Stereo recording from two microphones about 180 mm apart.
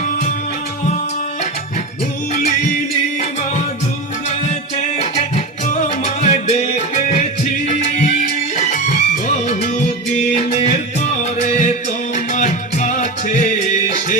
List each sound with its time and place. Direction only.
4.4 s music: 35° left (ahead or behind)
6.2 s music: 35° left (ahead or behind)
7.7 s music: 40° left (ahead or behind)